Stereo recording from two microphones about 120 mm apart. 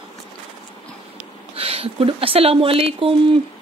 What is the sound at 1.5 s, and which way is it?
Speech, 55° right (ahead or behind).